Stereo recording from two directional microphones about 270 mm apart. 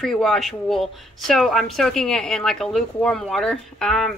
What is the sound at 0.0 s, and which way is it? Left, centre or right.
Speech, centre.